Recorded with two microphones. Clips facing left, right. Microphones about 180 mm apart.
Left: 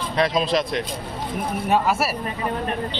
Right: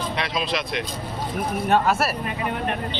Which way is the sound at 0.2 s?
40° left (ahead or behind).